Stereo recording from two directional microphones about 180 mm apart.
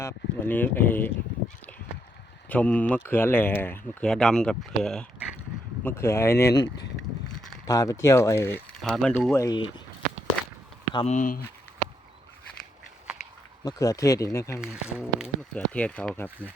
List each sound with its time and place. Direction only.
0.0 s speech: 10° left (ahead or behind)
2.5 s speech: 10° left (ahead or behind)
5.8 s speech: 15° left (ahead or behind)
8.8 s speech: 5° left (ahead or behind); by 9.8 s 25° left (ahead or behind)
10.9 s speech: 40° left (ahead or behind)
13.7 s speech: 20° left (ahead or behind)
14.6 s speech: 5° right (ahead or behind)
15.5 s speech: 5° left (ahead or behind)